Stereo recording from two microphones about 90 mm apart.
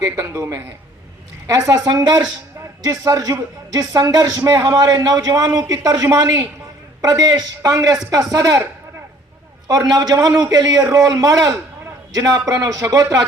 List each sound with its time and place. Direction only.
0.0 s a woman's voice: 35° right (ahead or behind)
9.6 s a man's voice: 45° right (ahead or behind)